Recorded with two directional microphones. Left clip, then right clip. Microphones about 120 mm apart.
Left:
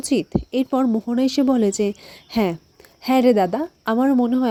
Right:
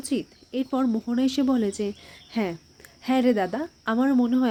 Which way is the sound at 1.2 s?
45° left (ahead or behind).